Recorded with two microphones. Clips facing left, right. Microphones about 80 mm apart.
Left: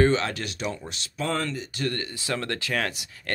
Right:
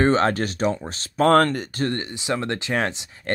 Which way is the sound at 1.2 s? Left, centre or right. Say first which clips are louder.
Right 12 dB; right.